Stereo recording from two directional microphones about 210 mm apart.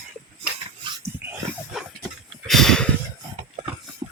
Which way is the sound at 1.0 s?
10° right (ahead or behind).